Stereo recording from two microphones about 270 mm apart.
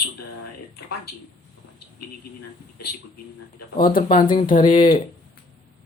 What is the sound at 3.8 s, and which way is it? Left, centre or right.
Speech, left.